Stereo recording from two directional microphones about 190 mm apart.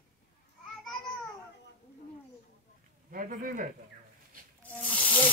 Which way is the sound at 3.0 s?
45° right (ahead or behind).